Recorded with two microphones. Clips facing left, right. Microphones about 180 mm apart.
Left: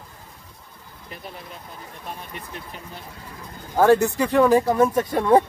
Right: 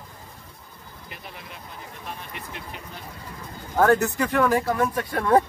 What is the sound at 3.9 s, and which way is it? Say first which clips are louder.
Speech: left 3 dB; 25° left (ahead or behind).